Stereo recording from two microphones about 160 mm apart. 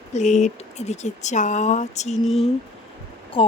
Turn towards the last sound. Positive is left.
turn(degrees=35)  # may be behind; listen again after turning